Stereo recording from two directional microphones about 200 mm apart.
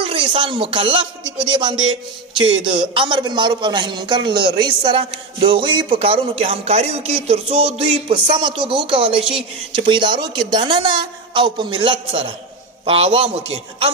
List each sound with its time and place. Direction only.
0.0 s a man's voice: 25° right (ahead or behind)